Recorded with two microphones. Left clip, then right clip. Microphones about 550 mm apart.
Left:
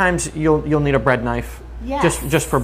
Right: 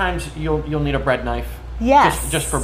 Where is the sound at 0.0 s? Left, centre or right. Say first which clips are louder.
Left 5 dB; left.